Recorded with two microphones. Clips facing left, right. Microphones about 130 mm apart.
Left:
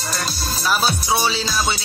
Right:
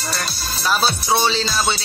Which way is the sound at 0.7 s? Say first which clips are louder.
Right 1 dB; 10° left (ahead or behind).